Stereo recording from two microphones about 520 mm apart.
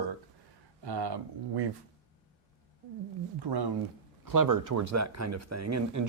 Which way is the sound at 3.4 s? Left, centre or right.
Right.